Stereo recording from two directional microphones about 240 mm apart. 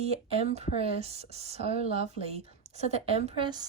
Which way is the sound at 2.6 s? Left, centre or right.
Right.